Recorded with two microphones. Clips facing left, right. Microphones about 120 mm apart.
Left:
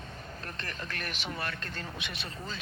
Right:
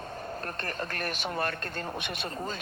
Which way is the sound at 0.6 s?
45° right (ahead or behind).